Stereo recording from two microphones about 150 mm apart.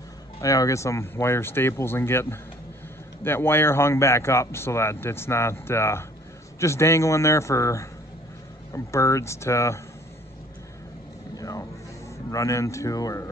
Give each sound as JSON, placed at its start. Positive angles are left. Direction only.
{"t": 0.4, "sound": "speech", "side_deg": 20}
{"t": 3.3, "sound": "a man's voice", "side_deg": 15}
{"t": 11.3, "sound": "vehicle", "side_deg": 20}
{"t": 12.3, "sound": "a man's voice", "side_deg": 20}